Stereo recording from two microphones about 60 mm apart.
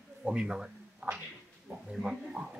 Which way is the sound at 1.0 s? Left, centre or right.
Right.